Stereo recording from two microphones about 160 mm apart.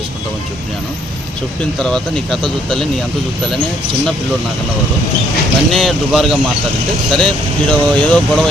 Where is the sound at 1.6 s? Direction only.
5° left (ahead or behind).